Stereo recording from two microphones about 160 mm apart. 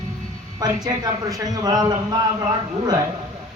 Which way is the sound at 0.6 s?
20° right (ahead or behind).